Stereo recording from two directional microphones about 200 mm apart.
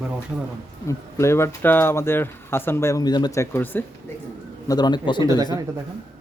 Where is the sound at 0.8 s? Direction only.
15° left (ahead or behind).